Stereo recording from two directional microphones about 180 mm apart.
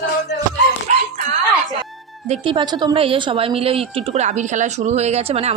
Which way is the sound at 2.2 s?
30° right (ahead or behind).